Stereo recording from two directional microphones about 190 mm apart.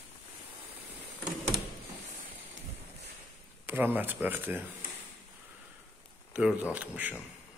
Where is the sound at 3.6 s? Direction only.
10° right (ahead or behind).